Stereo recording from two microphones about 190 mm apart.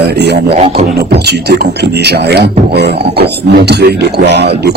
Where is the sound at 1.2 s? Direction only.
60° right (ahead or behind).